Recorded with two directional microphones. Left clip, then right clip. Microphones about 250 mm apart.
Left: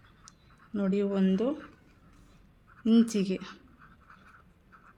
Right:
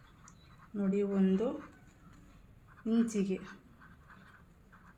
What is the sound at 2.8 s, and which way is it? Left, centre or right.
Speech, left.